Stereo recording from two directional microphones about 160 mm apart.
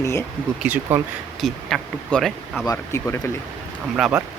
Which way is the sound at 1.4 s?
Centre (ahead or behind).